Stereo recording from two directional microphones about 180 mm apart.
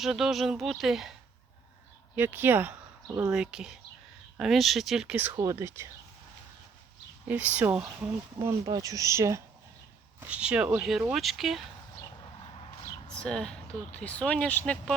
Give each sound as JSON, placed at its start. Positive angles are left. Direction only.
{"t": 0.0, "sound": "speech", "side_deg": 0}
{"t": 2.1, "sound": "speech", "side_deg": -10}
{"t": 3.3, "sound": "speech", "side_deg": -5}
{"t": 7.3, "sound": "speech", "side_deg": -10}
{"t": 12.8, "sound": "a sound", "side_deg": 25}
{"t": 13.1, "sound": "speech", "side_deg": 5}